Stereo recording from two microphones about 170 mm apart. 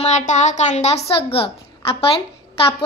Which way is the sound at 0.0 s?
45° left (ahead or behind).